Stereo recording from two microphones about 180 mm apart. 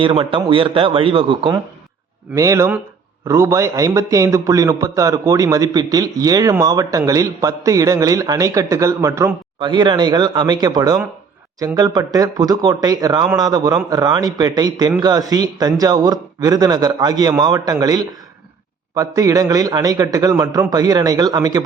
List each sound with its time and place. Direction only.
0.0 s a man's voice: 30° right (ahead or behind)